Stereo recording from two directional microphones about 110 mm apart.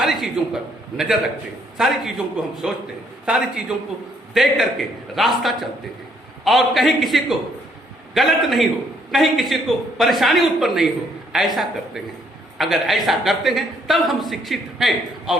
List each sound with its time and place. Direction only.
0.0 s a man's voice: centre (ahead or behind)